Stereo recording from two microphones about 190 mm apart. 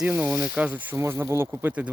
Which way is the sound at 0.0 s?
5° right (ahead or behind).